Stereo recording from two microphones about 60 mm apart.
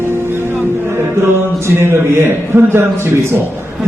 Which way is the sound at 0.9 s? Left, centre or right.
Right.